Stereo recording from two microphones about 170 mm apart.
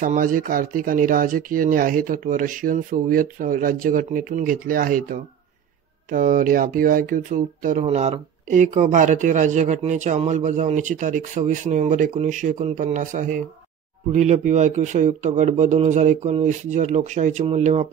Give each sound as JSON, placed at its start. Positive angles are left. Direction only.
{"t": 0.0, "sound": "speech", "side_deg": -50}